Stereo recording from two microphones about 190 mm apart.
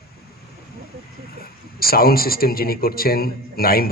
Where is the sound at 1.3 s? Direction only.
50° left (ahead or behind).